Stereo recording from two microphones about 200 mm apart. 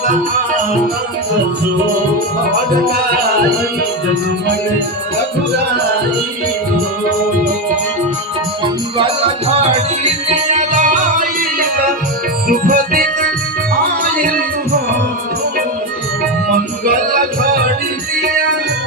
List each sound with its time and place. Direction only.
8.6 s music: 25° right (ahead or behind)
12.5 s music: 45° right (ahead or behind)
16.8 s music: 45° right (ahead or behind)